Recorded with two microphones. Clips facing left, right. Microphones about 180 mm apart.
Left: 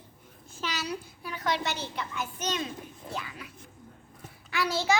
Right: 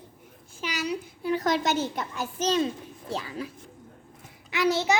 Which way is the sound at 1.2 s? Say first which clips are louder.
Right 7 dB; 40° right (ahead or behind).